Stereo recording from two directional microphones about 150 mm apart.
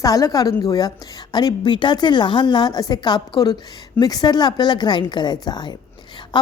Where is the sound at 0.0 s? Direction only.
25° left (ahead or behind).